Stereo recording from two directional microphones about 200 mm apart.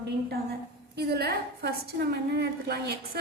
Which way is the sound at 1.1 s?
55° right (ahead or behind).